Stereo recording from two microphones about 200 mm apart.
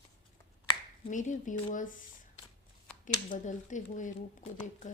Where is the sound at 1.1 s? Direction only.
40° left (ahead or behind).